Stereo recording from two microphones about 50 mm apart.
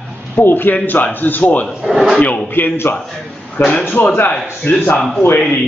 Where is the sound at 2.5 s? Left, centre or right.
Left.